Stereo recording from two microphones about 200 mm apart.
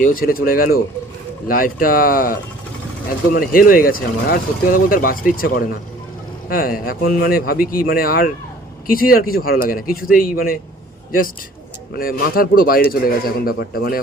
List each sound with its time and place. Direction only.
0.0 s speech: 45° left (ahead or behind)
11.9 s speech: 45° left (ahead or behind)